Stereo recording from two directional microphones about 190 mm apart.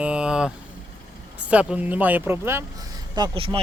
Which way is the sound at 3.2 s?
25° right (ahead or behind).